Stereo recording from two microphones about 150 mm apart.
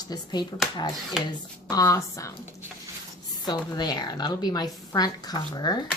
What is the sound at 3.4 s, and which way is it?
Speech, 25° left (ahead or behind).